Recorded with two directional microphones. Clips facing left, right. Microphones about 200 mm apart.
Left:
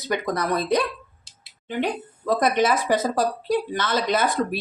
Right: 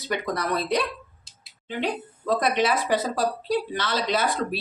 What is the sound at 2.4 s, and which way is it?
A woman's voice, 45° left (ahead or behind).